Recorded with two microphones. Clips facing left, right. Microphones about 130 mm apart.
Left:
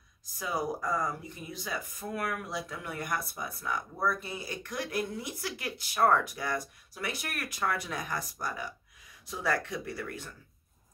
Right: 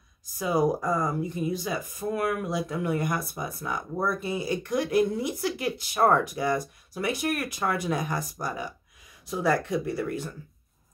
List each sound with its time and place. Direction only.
0.4 s speech: 15° right (ahead or behind)